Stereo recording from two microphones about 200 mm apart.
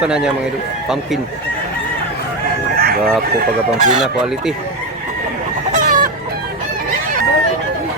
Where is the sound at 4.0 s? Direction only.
5° right (ahead or behind).